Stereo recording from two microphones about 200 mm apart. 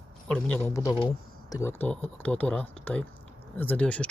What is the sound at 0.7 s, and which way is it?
Speech, 15° left (ahead or behind).